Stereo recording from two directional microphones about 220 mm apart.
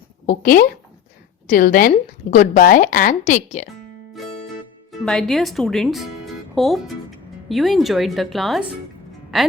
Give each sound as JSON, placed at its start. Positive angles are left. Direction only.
{"t": 0.3, "sound": "a woman's voice", "side_deg": 40}
{"t": 4.9, "sound": "speech", "side_deg": 0}